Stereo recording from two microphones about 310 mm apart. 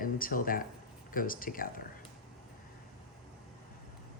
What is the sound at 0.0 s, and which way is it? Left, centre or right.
Speech, left.